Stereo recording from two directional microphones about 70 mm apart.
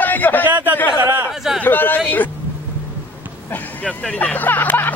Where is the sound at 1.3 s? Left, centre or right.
Centre.